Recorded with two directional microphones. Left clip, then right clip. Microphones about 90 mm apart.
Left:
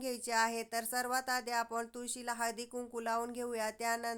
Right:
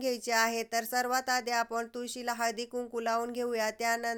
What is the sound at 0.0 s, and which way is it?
Speech, 30° right (ahead or behind).